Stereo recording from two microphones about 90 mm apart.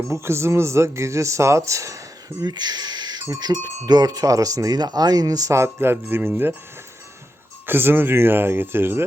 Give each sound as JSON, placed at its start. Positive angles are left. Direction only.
{"t": 0.1, "sound": "speech", "side_deg": -30}
{"t": 2.4, "sound": "speech", "side_deg": -50}
{"t": 7.7, "sound": "speech", "side_deg": -25}